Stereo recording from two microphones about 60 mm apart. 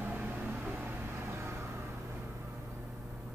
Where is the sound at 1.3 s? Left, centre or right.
Right.